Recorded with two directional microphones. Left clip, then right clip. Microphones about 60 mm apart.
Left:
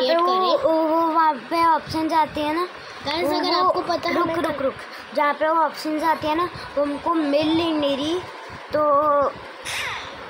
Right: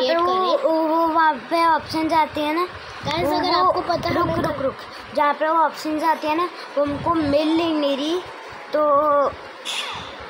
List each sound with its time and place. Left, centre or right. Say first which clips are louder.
0.0 s music: even; left
0.6 s child singing: even; centre
3.1 s a woman's voice: right 1 dB; left
5.1 s speech: right 1 dB; centre